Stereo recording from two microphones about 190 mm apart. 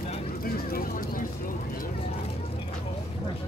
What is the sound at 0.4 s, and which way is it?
Vehicle, 50° left (ahead or behind).